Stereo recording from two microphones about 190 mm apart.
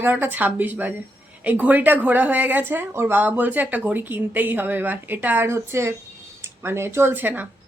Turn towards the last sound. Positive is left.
turn(degrees=-10)  # may be behind; listen again after turning